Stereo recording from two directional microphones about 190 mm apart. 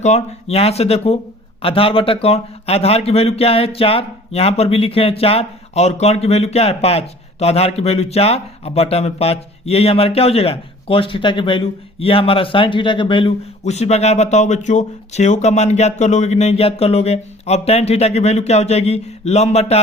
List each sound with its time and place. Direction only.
0.0 s speech: 35° left (ahead or behind)